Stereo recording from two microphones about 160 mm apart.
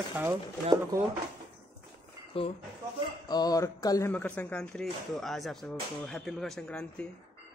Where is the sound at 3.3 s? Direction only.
25° left (ahead or behind).